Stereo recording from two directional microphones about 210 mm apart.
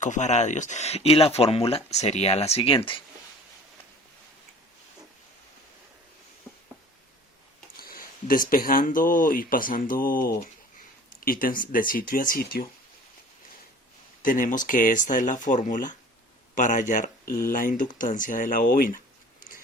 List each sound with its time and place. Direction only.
0.0 s speech: 35° left (ahead or behind)
7.8 s speech: 45° left (ahead or behind)
14.2 s speech: 40° left (ahead or behind)